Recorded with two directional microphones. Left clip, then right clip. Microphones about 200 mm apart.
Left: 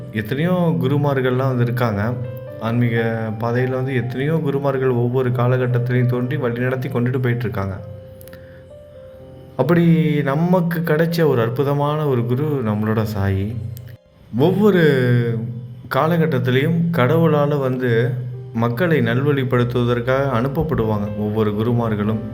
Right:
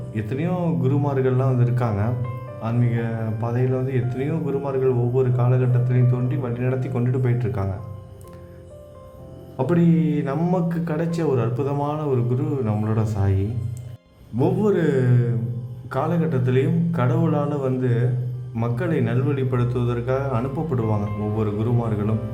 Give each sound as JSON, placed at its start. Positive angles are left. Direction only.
{"t": 0.1, "sound": "speech", "side_deg": 10}
{"t": 9.6, "sound": "speech", "side_deg": 15}
{"t": 14.3, "sound": "speech", "side_deg": 15}